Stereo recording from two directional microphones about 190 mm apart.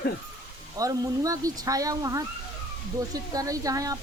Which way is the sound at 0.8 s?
20° right (ahead or behind).